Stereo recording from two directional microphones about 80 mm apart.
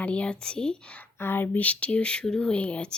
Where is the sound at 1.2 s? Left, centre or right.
Left.